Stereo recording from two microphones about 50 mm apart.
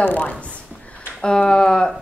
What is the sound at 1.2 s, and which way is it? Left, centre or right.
Speech, centre.